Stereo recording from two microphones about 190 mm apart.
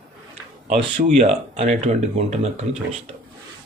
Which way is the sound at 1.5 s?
35° right (ahead or behind).